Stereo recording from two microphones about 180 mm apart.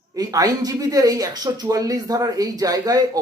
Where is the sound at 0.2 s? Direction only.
20° right (ahead or behind).